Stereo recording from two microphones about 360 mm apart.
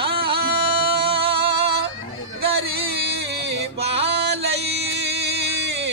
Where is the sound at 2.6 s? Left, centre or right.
Right.